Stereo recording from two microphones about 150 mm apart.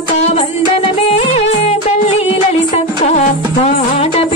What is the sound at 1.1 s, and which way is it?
Music, 45° left (ahead or behind).